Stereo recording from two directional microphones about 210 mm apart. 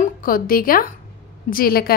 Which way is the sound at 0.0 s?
40° left (ahead or behind).